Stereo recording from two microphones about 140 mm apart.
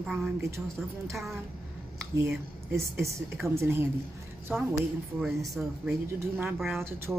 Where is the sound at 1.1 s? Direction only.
Centre (ahead or behind).